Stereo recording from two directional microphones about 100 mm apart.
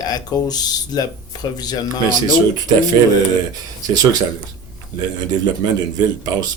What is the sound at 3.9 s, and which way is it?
Speech, 40° right (ahead or behind).